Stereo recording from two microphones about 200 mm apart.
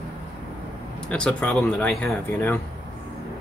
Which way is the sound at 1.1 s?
5° left (ahead or behind).